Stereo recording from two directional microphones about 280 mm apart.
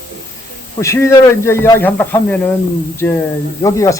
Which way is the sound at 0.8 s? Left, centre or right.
Centre.